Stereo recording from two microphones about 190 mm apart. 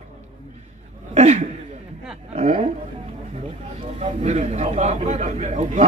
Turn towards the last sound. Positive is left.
turn(degrees=-35)  # may be behind; listen again after turning